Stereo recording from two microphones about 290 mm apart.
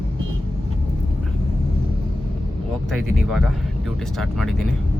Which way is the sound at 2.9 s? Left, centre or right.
Centre.